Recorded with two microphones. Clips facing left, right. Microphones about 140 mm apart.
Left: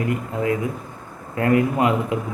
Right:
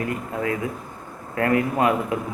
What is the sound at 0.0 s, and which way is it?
A man's voice, 20° left (ahead or behind).